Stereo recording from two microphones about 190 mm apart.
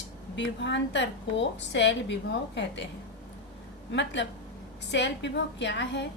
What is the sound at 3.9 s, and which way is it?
A woman's voice, 70° left (ahead or behind).